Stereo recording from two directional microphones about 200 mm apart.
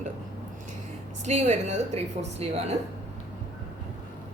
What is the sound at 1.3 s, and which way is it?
A woman's voice, 35° right (ahead or behind).